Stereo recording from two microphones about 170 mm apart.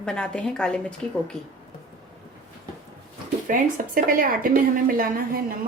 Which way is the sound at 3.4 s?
50° right (ahead or behind).